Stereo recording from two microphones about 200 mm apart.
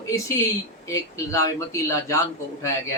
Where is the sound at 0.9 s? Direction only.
15° left (ahead or behind).